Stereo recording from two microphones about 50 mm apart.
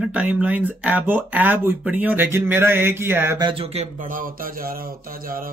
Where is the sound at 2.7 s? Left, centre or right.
Right.